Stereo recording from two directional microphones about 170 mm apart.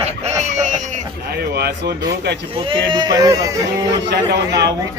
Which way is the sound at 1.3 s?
70° right (ahead or behind).